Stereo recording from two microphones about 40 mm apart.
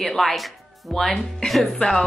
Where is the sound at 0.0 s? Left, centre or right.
Centre.